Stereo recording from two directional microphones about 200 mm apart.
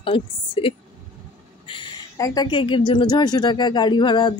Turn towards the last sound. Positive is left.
turn(degrees=20)  # may be behind; listen again after turning